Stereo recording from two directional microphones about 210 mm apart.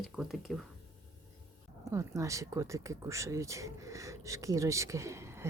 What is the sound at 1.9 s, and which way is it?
Speech, 15° right (ahead or behind).